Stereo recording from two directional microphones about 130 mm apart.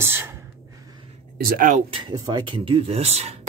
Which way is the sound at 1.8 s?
40° right (ahead or behind).